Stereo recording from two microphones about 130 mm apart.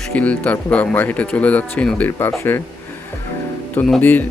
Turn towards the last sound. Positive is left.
turn(degrees=10)  # may be behind; listen again after turning